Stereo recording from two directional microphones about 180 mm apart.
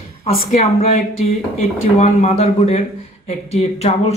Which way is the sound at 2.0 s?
35° left (ahead or behind).